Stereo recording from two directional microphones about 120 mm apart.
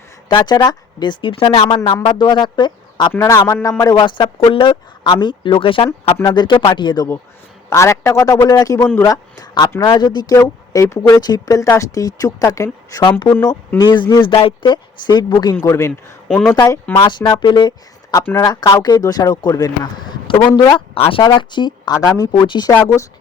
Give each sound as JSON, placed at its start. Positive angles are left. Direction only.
{"t": 0.3, "sound": "speech", "side_deg": 40}
{"t": 3.1, "sound": "speech", "side_deg": 25}
{"t": 4.0, "sound": "speech", "side_deg": 45}
{"t": 6.2, "sound": "speech", "side_deg": 40}
{"t": 7.7, "sound": "speech", "side_deg": 20}
{"t": 10.3, "sound": "speech", "side_deg": 25}
{"t": 13.7, "sound": "speech", "side_deg": 40}
{"t": 15.6, "sound": "speech", "side_deg": 20}
{"t": 17.0, "sound": "speech", "side_deg": 40}
{"t": 21.2, "sound": "speech", "side_deg": 40}
{"t": 22.7, "sound": "speech", "side_deg": 20}